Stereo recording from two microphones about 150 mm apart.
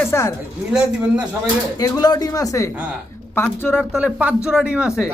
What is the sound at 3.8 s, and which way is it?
Speech, 5° right (ahead or behind).